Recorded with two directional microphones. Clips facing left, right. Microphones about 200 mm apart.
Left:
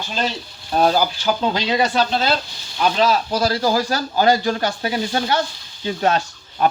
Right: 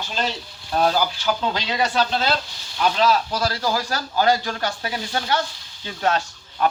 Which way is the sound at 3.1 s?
25° left (ahead or behind).